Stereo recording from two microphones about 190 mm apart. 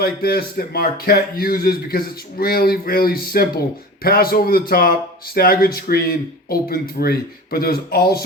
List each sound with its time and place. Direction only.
0.0 s a man's voice: 55° left (ahead or behind)